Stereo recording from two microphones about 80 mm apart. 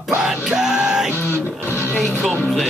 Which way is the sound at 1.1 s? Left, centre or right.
Left.